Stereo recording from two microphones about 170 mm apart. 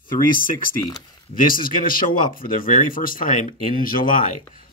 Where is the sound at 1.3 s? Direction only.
55° left (ahead or behind).